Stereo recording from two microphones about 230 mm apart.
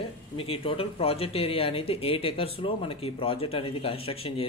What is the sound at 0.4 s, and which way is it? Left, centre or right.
Speech, left.